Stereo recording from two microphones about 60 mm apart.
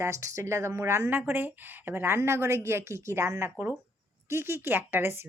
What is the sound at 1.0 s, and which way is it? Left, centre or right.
A woman's voice, right.